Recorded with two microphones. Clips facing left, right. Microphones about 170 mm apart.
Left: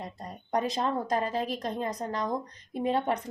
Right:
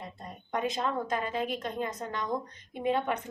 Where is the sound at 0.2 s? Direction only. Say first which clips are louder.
Left 3 dB; 40° left (ahead or behind).